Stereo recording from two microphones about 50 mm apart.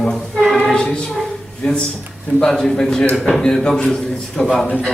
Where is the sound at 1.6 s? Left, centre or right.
Centre.